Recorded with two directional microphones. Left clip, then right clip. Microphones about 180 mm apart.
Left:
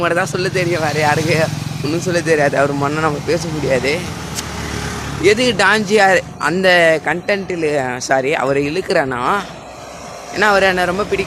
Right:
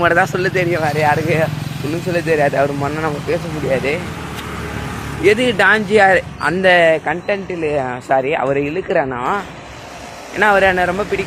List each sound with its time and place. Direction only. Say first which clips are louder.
0.0 s speech: right 3 dB; 5° right (ahead or behind); by 4.0 s 20° left (ahead or behind)
5.2 s speech: even; 10° left (ahead or behind)